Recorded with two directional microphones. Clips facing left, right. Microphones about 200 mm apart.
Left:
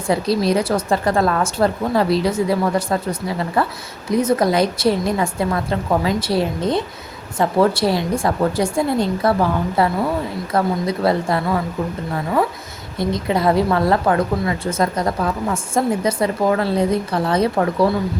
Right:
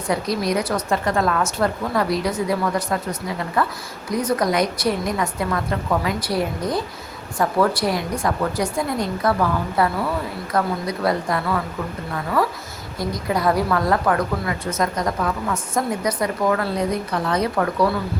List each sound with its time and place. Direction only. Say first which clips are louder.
0.1 s a woman's voice: left 4 dB; 30° left (ahead or behind)